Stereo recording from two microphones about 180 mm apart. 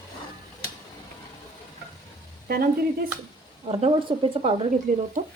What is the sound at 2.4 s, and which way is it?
Speech, 55° right (ahead or behind).